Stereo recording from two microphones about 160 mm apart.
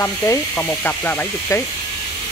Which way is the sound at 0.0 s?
15° left (ahead or behind).